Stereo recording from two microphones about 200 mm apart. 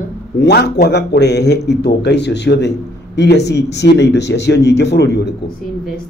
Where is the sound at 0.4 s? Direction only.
55° left (ahead or behind).